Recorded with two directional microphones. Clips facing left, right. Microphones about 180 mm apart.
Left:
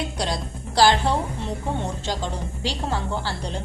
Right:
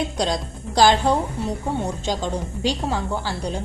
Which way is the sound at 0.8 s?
15° right (ahead or behind).